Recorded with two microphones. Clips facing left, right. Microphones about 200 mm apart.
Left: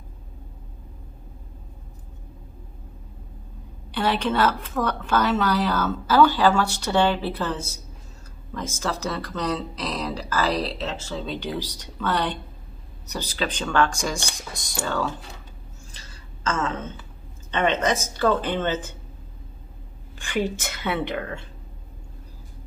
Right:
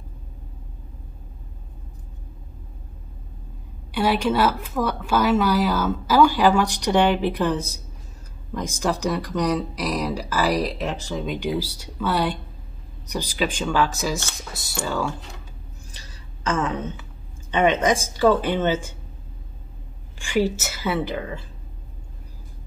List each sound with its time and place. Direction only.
3.9 s a woman's voice: 10° right (ahead or behind)
16.4 s a woman's voice: 15° right (ahead or behind)
20.2 s a woman's voice: 10° right (ahead or behind)